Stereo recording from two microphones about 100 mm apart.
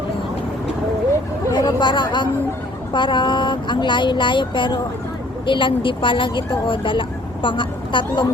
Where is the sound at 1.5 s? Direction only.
45° left (ahead or behind).